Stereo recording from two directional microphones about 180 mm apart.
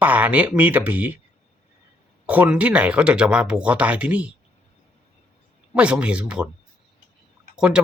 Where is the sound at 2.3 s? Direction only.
10° right (ahead or behind).